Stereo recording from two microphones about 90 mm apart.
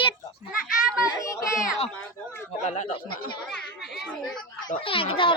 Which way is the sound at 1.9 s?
20° left (ahead or behind).